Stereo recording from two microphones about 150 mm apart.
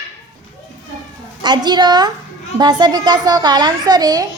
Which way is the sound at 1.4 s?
30° right (ahead or behind).